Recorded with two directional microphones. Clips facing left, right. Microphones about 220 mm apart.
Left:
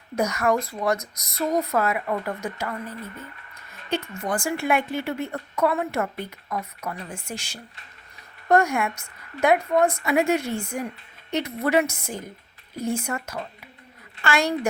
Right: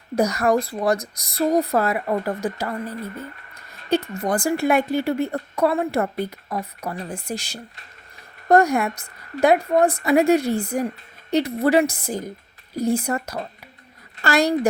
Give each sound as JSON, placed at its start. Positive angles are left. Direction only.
{"t": 0.2, "sound": "a woman's voice", "side_deg": -35}